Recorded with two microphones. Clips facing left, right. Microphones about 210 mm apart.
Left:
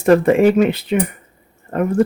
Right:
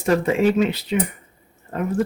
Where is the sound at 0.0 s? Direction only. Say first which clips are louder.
Left 6 dB; 55° left (ahead or behind).